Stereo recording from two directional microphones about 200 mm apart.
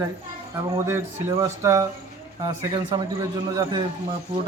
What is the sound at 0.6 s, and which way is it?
A man's voice, 15° right (ahead or behind).